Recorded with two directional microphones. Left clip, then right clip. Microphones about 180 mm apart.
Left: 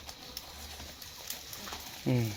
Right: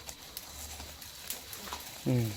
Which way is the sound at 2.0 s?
Centre (ahead or behind).